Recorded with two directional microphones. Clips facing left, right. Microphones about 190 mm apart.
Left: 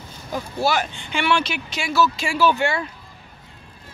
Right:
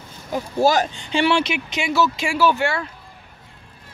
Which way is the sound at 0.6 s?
40° right (ahead or behind).